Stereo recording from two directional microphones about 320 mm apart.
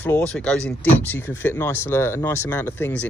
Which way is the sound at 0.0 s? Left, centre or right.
Centre.